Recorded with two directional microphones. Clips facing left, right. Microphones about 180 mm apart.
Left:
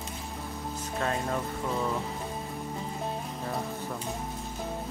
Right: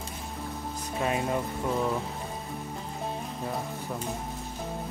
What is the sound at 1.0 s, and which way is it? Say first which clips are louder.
Speech: right 2 dB; 15° right (ahead or behind).